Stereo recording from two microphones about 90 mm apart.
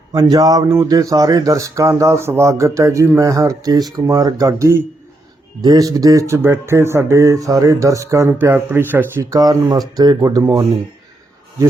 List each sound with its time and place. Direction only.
0.1 s speech: 40° right (ahead or behind)
8.3 s speech: 25° right (ahead or behind)
9.3 s speech: 45° right (ahead or behind)